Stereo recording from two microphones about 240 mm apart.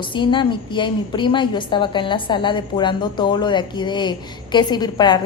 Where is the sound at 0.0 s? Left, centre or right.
Centre.